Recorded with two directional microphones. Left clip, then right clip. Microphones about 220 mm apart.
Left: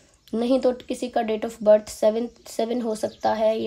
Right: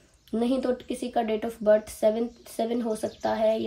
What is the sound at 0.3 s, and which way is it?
Speech, 35° left (ahead or behind).